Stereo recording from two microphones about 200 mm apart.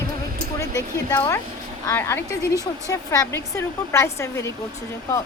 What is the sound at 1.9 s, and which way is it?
A woman's voice, 15° left (ahead or behind).